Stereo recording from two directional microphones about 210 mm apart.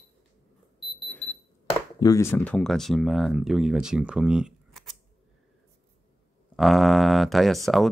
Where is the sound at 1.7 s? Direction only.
20° left (ahead or behind); by 4.9 s centre (ahead or behind).